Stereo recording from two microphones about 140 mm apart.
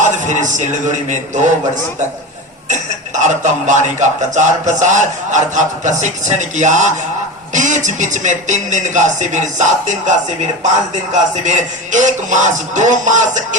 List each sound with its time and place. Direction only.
0.0 s a man's voice: 60° right (ahead or behind)
2.6 s speech: 60° right (ahead or behind)